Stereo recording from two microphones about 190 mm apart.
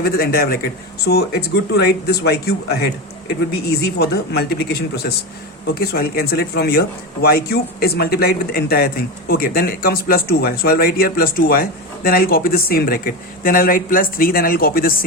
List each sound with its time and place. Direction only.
0.0 s speech: 50° left (ahead or behind)